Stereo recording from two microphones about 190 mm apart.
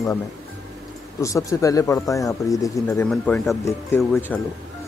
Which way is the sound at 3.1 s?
5° left (ahead or behind).